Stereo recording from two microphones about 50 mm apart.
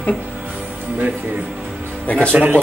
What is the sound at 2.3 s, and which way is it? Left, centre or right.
Speech, right.